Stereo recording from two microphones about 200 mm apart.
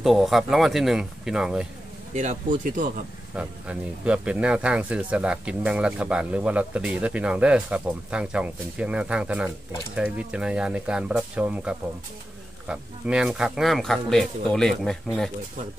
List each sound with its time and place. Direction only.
0.0 s speech: centre (ahead or behind)
2.1 s speech: 40° right (ahead or behind)
3.3 s speech: 5° right (ahead or behind)